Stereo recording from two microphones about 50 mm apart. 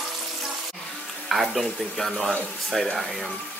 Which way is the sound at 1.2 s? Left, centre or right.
Centre.